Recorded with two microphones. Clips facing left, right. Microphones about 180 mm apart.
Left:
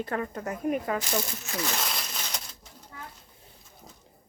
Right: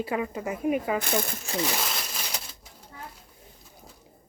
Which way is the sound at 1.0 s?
55° right (ahead or behind).